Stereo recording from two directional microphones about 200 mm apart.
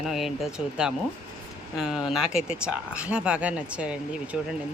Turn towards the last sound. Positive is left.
turn(degrees=-5)  # may be behind; listen again after turning